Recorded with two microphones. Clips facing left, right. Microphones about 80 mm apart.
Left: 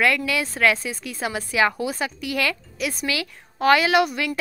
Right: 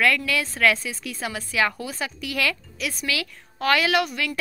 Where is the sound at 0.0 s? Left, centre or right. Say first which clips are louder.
Left 1 dB; centre.